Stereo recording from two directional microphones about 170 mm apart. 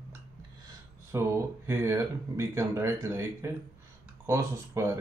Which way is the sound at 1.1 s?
15° right (ahead or behind).